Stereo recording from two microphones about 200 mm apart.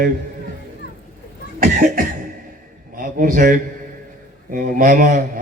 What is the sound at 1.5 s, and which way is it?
A man's voice, 45° right (ahead or behind).